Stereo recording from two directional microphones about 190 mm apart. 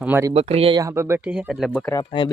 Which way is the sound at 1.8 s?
20° left (ahead or behind).